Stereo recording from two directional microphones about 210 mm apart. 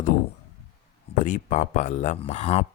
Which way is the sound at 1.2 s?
35° left (ahead or behind).